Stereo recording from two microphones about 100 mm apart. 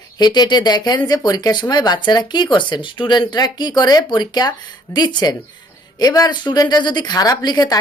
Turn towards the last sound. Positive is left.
turn(degrees=45)  # may be behind; listen again after turning